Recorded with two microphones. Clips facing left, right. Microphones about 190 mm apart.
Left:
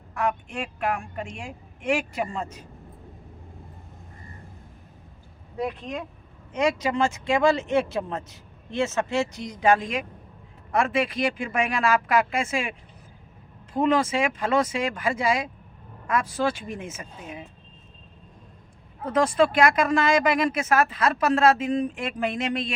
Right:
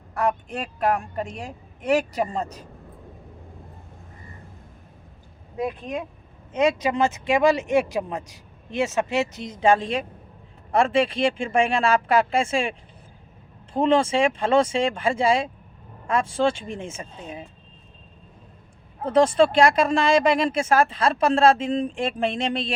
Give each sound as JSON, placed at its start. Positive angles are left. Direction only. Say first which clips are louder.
{"t": 0.1, "sound": "a woman's voice", "louder": "right 3 dB", "side_deg": -40}
{"t": 5.5, "sound": "speech", "louder": "right 2 dB", "side_deg": -15}
{"t": 13.7, "sound": "speech", "louder": "right 3 dB", "side_deg": -30}
{"t": 19.0, "sound": "speech", "louder": "right 3 dB", "side_deg": -30}